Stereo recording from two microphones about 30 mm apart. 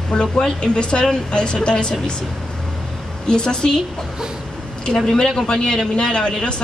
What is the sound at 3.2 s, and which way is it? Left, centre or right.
Speech, left.